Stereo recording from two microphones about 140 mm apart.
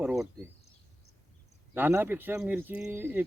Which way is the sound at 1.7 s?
15° right (ahead or behind).